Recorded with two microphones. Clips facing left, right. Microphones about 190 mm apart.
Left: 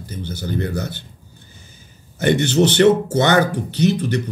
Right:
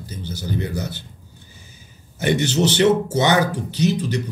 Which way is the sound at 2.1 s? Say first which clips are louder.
Left 3 dB; 55° left (ahead or behind).